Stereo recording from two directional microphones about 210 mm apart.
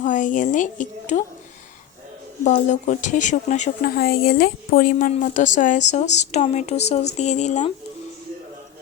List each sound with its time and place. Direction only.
0.0 s speech: 35° left (ahead or behind)
2.4 s speech: 35° left (ahead or behind)